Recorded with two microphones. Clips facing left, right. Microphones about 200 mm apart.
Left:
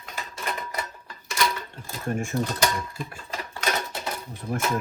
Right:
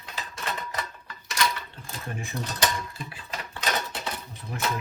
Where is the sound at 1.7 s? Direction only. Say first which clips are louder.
Left 7 dB; 50° left (ahead or behind).